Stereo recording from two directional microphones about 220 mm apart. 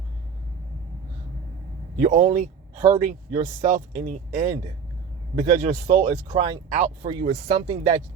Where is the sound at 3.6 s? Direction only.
35° right (ahead or behind).